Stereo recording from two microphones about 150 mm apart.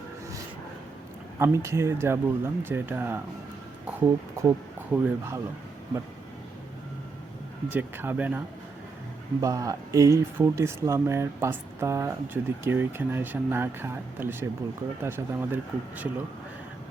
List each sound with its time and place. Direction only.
1.4 s speech: 20° right (ahead or behind)
7.7 s speech: 15° right (ahead or behind)
9.4 s speech: 25° right (ahead or behind)